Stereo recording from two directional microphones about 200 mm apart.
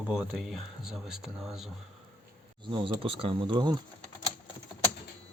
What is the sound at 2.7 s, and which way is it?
Speech, 25° right (ahead or behind).